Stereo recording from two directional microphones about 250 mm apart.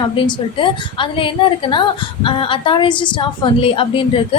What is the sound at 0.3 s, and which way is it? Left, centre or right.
A woman's voice, centre.